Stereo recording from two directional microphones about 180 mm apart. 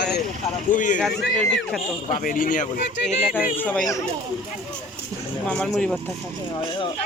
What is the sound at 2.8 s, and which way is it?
Speech, 75° left (ahead or behind).